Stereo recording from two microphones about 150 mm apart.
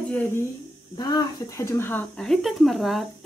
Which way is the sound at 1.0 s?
25° left (ahead or behind).